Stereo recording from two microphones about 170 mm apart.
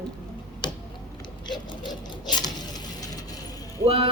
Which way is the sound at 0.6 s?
25° left (ahead or behind).